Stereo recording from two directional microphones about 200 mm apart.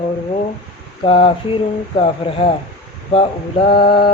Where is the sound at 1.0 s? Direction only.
25° left (ahead or behind).